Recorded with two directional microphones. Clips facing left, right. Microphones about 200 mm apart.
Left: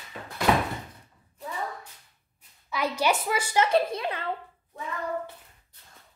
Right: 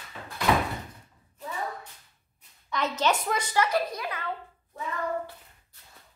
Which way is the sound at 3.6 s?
25° left (ahead or behind).